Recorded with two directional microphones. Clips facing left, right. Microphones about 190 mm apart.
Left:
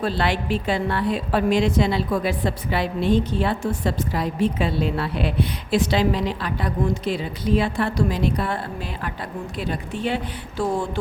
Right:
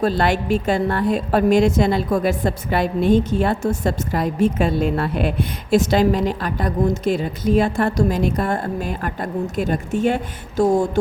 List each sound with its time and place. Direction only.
0.0 s a woman's voice: 45° right (ahead or behind)